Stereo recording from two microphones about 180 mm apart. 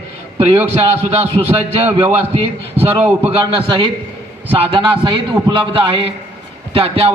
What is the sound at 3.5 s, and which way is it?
A man's voice, 30° right (ahead or behind).